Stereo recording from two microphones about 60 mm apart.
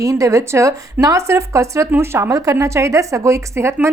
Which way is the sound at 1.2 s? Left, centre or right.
Right.